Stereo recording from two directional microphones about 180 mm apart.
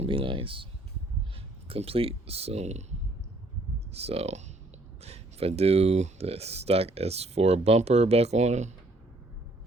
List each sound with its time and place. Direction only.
0.0 s speech: 30° right (ahead or behind)
3.9 s speech: 35° right (ahead or behind)